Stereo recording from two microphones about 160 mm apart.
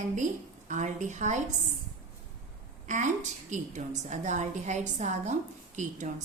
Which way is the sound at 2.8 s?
50° right (ahead or behind).